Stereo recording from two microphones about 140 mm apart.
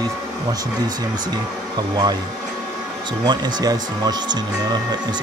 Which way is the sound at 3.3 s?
30° right (ahead or behind).